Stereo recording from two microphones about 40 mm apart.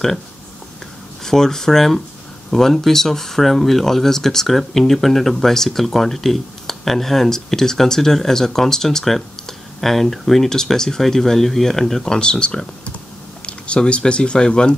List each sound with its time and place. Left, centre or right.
1.2 s speech: centre
10.5 s speech: centre
12.1 s speech: left